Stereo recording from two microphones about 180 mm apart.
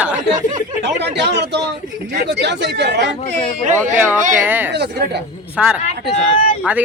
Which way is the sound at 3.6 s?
45° right (ahead or behind).